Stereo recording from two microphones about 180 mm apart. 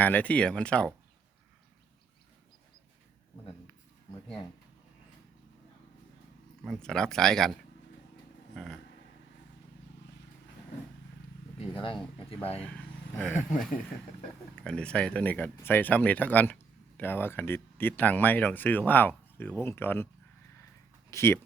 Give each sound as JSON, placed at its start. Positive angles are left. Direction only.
{"t": 0.0, "sound": "speech", "side_deg": 10}
{"t": 6.7, "sound": "speech", "side_deg": 5}
{"t": 8.5, "sound": "vehicle", "side_deg": 0}
{"t": 11.6, "sound": "speech", "side_deg": 30}
{"t": 12.6, "sound": "speech", "side_deg": 5}
{"t": 14.5, "sound": "speech", "side_deg": 5}
{"t": 21.1, "sound": "speech", "side_deg": 15}